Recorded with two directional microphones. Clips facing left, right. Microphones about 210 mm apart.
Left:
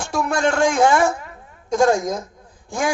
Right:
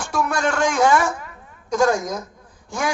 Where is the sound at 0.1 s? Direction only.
25° left (ahead or behind).